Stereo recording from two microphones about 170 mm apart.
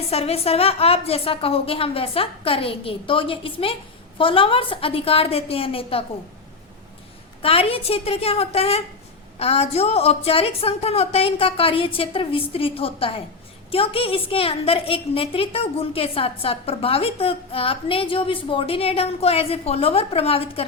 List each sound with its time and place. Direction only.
0.1 s a woman's voice: 35° left (ahead or behind)
7.4 s a woman's voice: 35° left (ahead or behind)